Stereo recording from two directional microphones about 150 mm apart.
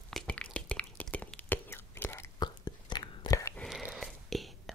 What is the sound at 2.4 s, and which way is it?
Whispering, 30° left (ahead or behind).